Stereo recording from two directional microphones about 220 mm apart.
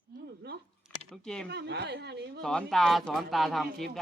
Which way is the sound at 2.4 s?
5° left (ahead or behind).